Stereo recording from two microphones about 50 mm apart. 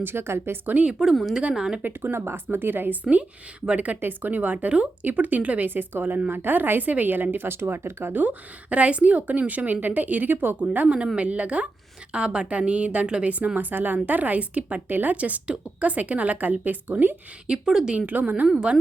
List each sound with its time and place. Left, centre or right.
0.0 s a woman's voice: right
0.7 s speech: right
1.5 s speech: centre
1.8 s a woman's voice: right
3.0 s a woman's voice: right
5.6 s a woman's voice: right
8.1 s a woman's voice: right
10.6 s a woman's voice: right
15.1 s a woman's voice: right
17.7 s speech: centre
17.9 s a woman's voice: right
18.5 s speech: right